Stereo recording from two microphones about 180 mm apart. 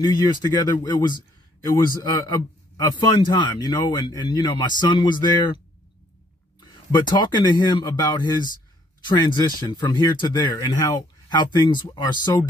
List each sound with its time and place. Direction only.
0.0 s a man's voice: 20° left (ahead or behind)
6.6 s a man's voice: 25° left (ahead or behind)